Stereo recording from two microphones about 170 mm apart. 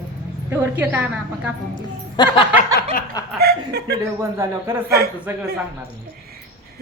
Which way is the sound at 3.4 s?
70° right (ahead or behind).